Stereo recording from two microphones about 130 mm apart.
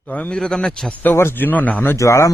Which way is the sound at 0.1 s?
5° left (ahead or behind).